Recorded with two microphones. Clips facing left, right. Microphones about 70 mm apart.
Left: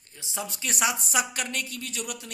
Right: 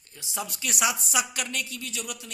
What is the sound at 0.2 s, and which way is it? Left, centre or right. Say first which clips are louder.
Speech: even; left.